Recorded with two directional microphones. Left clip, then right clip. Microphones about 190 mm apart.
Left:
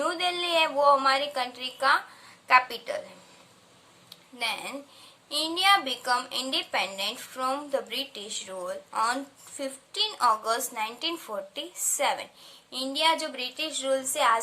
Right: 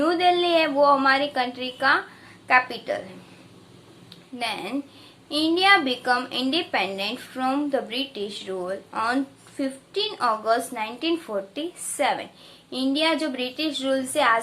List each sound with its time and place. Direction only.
0.0 s a woman's voice: 20° left (ahead or behind)
4.4 s a woman's voice: 20° left (ahead or behind)